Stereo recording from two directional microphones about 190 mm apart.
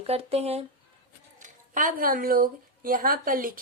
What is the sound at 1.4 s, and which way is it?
A woman's voice, 45° right (ahead or behind).